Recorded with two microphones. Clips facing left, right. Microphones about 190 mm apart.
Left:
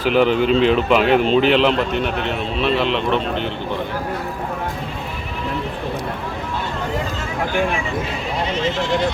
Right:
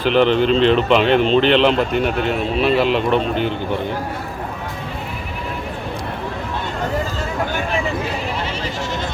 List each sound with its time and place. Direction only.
0.0 s speech: 5° left (ahead or behind)